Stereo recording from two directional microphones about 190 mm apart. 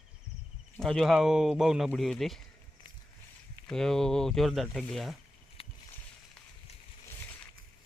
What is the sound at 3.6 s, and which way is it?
Speech, 5° left (ahead or behind).